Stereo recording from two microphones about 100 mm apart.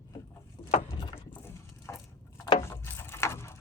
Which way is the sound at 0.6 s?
60° left (ahead or behind).